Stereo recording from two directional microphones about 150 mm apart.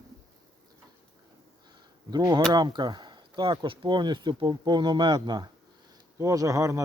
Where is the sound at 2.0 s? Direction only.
25° right (ahead or behind).